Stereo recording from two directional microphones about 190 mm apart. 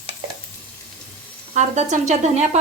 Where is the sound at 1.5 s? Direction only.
40° right (ahead or behind).